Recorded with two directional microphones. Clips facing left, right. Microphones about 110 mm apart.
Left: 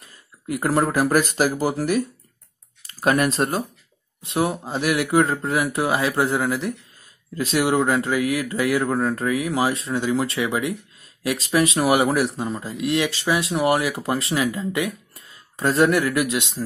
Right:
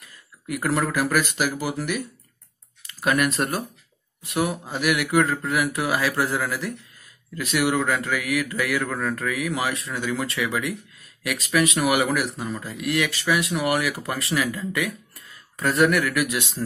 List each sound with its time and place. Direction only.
0.0 s speech: 30° left (ahead or behind)